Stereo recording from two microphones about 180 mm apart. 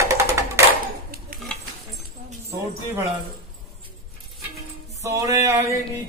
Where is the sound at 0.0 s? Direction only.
15° right (ahead or behind).